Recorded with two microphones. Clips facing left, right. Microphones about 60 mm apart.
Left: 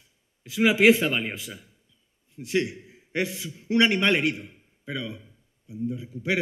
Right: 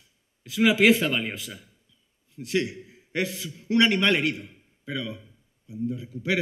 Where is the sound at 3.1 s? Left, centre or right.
Left.